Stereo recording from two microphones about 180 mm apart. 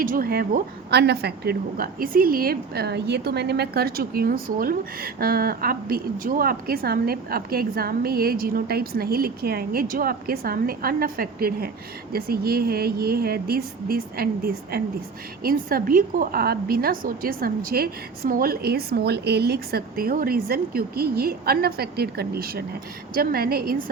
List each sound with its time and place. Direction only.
0.0 s a woman's voice: 50° right (ahead or behind)